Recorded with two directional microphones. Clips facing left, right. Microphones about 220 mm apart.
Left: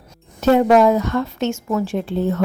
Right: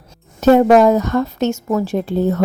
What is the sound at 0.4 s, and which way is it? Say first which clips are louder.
Speech: right 3 dB; 40° right (ahead or behind).